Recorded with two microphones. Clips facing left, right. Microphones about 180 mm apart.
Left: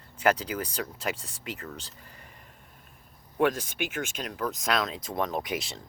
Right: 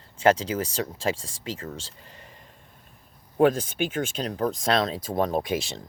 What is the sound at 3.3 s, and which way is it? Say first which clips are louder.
Speech: right 5 dB; 30° right (ahead or behind).